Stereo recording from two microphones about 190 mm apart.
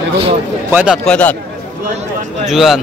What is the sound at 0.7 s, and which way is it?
Speech, 10° right (ahead or behind).